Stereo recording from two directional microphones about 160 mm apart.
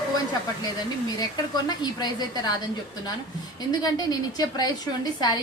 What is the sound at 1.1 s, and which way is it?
A woman's voice, 25° left (ahead or behind).